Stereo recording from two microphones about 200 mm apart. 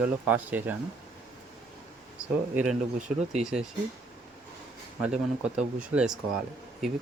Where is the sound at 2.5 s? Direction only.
5° right (ahead or behind).